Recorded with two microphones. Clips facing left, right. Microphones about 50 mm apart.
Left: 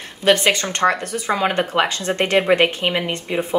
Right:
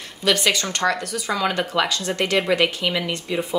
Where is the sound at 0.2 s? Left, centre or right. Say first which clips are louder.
Left 4 dB; left.